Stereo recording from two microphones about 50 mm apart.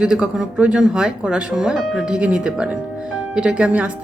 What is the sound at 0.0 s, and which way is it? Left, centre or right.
Speech, centre.